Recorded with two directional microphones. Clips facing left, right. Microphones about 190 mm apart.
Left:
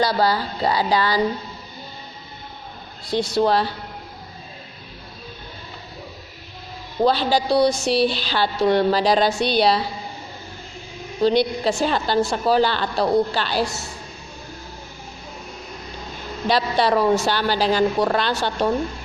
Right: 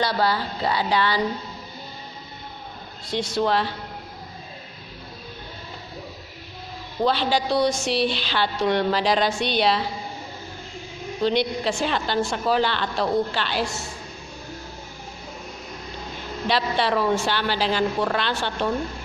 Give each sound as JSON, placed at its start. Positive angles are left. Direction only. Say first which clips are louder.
{"t": 0.0, "sound": "a woman's voice", "louder": "left 3 dB", "side_deg": 40}
{"t": 3.1, "sound": "a woman's voice", "louder": "left 4 dB", "side_deg": 35}
{"t": 7.0, "sound": "a woman's voice", "louder": "left 3 dB", "side_deg": 40}
{"t": 11.2, "sound": "a woman's voice", "louder": "left 4 dB", "side_deg": 40}
{"t": 16.5, "sound": "a woman's voice", "louder": "left 4 dB", "side_deg": 40}